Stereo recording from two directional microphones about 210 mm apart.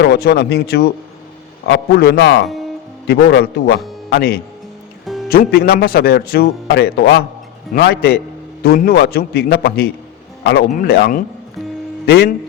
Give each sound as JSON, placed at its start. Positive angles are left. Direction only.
{"t": 0.0, "sound": "a man's voice", "side_deg": 50}